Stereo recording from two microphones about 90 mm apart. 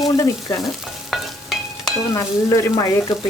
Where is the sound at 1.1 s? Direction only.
Centre (ahead or behind).